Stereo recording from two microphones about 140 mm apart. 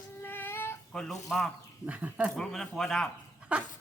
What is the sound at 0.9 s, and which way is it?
Speech, 5° left (ahead or behind).